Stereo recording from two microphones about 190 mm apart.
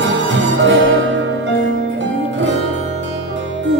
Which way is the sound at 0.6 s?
75° right (ahead or behind).